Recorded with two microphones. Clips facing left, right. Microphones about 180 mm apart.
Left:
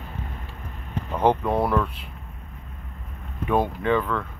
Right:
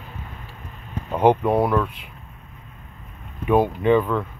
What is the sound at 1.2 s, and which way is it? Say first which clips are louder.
Speech: right 4 dB; 15° right (ahead or behind).